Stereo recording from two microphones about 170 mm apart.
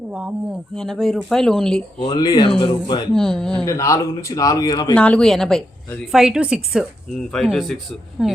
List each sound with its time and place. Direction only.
0.1 s a woman's voice: 5° right (ahead or behind)
2.0 s speech: 25° left (ahead or behind)
3.1 s a woman's voice: 5° left (ahead or behind)
3.7 s speech: 20° left (ahead or behind)
4.9 s a woman's voice: 5° left (ahead or behind)